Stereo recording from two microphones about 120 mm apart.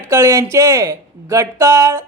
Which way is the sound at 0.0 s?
25° right (ahead or behind).